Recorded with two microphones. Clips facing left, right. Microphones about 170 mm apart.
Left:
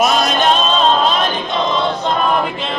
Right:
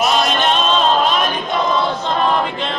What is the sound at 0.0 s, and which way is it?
Choir, 45° left (ahead or behind).